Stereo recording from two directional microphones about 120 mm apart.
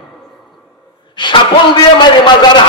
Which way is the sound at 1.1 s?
40° left (ahead or behind).